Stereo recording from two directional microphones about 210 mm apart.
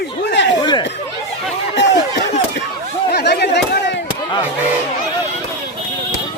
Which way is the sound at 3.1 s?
50° left (ahead or behind).